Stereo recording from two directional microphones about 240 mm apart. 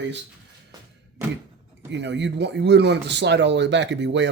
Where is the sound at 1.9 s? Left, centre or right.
Right.